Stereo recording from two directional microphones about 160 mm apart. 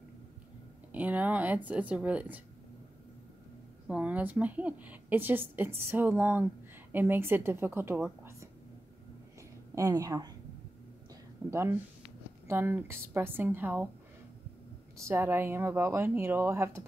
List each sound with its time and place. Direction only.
0.9 s a woman's voice: 10° right (ahead or behind)
3.8 s a woman's voice: 10° right (ahead or behind)
9.8 s a woman's voice: 20° right (ahead or behind)
11.4 s a woman's voice: 20° right (ahead or behind)
15.0 s a woman's voice: 15° right (ahead or behind)